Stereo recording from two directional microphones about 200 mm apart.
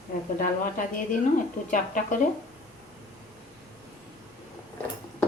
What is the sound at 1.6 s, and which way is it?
Speech, 40° left (ahead or behind).